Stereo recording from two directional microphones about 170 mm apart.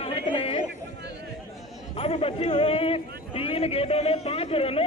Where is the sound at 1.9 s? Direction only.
35° left (ahead or behind).